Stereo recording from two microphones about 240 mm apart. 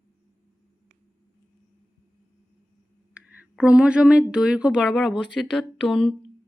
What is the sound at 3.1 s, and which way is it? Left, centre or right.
Speech, centre.